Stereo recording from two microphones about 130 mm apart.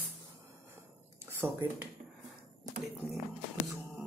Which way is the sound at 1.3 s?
20° right (ahead or behind).